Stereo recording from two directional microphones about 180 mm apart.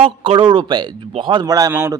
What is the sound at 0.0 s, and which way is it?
A man's voice, 30° right (ahead or behind).